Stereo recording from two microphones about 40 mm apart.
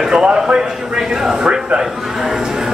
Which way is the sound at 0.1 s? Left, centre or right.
Right.